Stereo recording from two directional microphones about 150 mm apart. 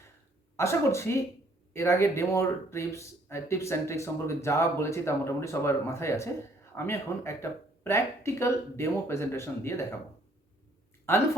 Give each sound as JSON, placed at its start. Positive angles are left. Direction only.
{"t": 0.5, "sound": "speech", "side_deg": 20}